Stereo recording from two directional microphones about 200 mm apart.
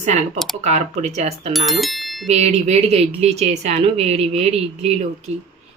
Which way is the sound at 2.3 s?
35° right (ahead or behind).